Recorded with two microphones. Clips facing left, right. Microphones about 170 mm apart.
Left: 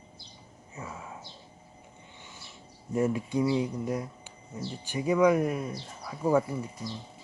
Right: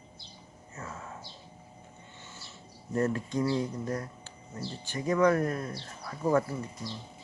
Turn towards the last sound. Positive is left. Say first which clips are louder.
# left 2 dB
turn(degrees=10)  # may be behind; listen again after turning